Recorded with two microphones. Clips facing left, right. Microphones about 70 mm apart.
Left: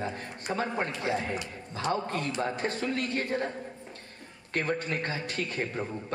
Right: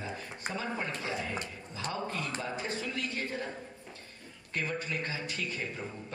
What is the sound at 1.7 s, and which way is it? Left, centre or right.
A man's voice, left.